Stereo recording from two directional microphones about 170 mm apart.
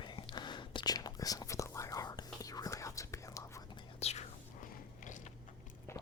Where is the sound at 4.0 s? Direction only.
40° left (ahead or behind).